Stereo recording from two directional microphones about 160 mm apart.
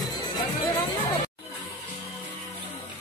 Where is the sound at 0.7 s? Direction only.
25° left (ahead or behind).